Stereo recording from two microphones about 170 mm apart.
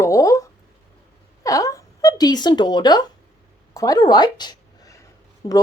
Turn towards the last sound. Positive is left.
turn(degrees=30)  # may be behind; listen again after turning